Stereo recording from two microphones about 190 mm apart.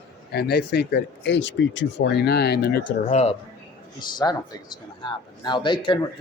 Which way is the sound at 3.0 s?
30° left (ahead or behind).